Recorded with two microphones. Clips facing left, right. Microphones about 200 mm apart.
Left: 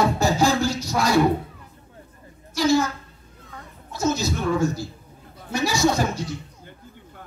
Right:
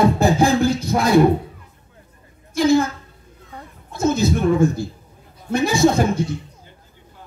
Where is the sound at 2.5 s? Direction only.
55° right (ahead or behind).